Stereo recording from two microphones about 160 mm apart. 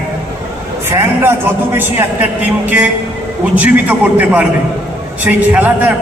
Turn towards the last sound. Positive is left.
turn(degrees=-10)  # may be behind; listen again after turning